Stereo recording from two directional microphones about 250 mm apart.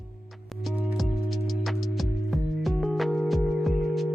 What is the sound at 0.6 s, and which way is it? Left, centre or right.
Music, centre.